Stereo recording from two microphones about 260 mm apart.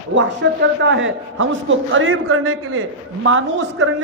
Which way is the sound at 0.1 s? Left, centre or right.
Right.